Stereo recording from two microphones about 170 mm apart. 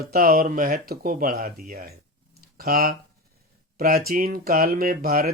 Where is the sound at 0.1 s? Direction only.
65° right (ahead or behind).